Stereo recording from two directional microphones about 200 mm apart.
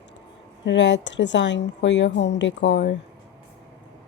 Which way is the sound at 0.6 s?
65° left (ahead or behind).